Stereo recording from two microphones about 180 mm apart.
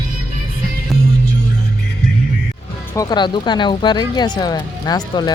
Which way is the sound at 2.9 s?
25° left (ahead or behind).